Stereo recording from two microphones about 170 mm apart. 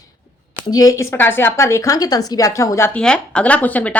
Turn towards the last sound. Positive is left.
turn(degrees=10)  # may be behind; listen again after turning